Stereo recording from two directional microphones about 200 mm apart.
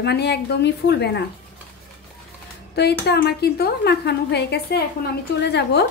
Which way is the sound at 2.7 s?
55° left (ahead or behind).